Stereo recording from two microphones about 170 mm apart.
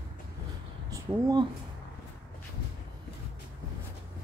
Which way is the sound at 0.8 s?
20° right (ahead or behind).